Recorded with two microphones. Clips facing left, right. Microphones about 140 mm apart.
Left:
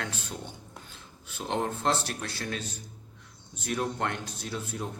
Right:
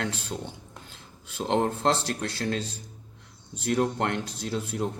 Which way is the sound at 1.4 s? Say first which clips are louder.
Right 5 dB; 35° right (ahead or behind).